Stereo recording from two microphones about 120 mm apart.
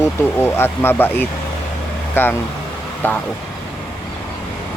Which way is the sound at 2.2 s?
15° left (ahead or behind).